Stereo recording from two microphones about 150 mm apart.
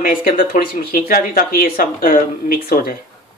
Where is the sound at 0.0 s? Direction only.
70° left (ahead or behind).